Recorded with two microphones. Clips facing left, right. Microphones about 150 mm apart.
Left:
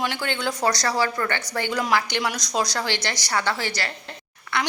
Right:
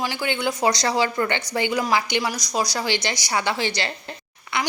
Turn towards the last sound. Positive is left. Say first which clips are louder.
# even
turn(degrees=-15)  # may be behind; listen again after turning